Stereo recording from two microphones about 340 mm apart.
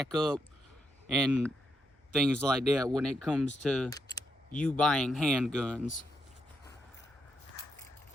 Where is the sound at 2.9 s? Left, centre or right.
Centre.